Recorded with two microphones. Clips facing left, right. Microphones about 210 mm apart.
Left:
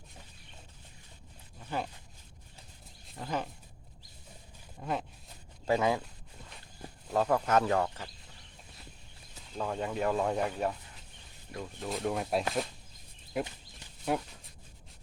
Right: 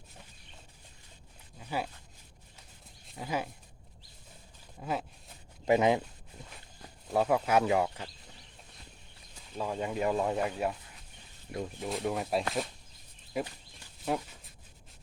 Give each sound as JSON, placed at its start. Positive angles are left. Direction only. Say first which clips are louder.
{"t": 1.5, "sound": "a sound", "louder": "right 1 dB", "side_deg": -5}
{"t": 3.1, "sound": "speech", "louder": "right 1 dB", "side_deg": -5}
{"t": 4.8, "sound": "speech", "louder": "even", "side_deg": -5}
{"t": 5.6, "sound": "speech", "louder": "right 3 dB", "side_deg": -20}
{"t": 7.1, "sound": "speech", "louder": "right 1 dB", "side_deg": -10}
{"t": 9.6, "sound": "speech", "louder": "even", "side_deg": -5}
{"t": 11.5, "sound": "speech", "louder": "right 3 dB", "side_deg": -20}
{"t": 11.9, "sound": "speech", "louder": "left 1 dB", "side_deg": 0}
{"t": 14.1, "sound": "speech", "louder": "left 1 dB", "side_deg": 0}